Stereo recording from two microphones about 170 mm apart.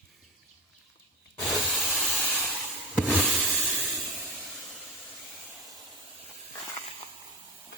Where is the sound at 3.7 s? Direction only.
10° right (ahead or behind).